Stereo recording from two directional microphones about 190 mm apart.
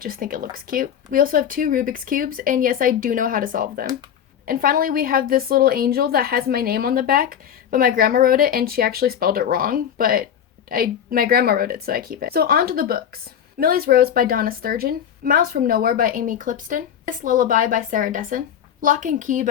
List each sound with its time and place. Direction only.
0.0 s speech: 50° right (ahead or behind)